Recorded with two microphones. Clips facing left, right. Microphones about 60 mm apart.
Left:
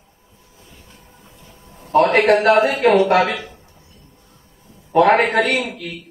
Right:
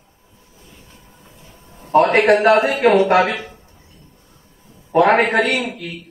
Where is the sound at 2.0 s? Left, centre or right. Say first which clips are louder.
Even; centre.